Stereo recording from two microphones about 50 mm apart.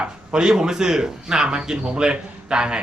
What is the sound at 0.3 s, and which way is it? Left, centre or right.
Speech, centre.